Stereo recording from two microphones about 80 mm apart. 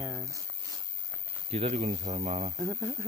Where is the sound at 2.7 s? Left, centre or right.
Right.